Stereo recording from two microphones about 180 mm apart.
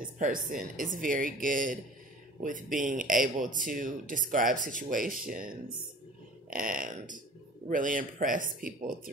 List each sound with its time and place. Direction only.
0.2 s speech: 50° right (ahead or behind)
6.5 s speech: 50° right (ahead or behind)